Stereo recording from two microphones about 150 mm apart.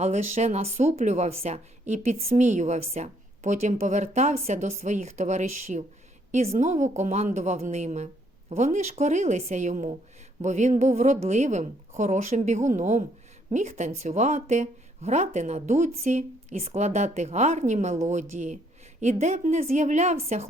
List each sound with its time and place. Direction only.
0.0 s speech: 50° right (ahead or behind)